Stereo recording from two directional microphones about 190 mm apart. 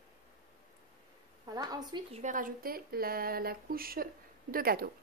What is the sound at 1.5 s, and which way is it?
Speech, 20° right (ahead or behind).